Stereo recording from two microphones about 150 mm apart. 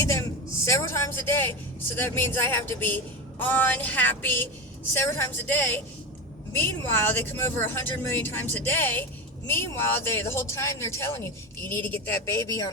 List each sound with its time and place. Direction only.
0.6 s speech: 20° left (ahead or behind)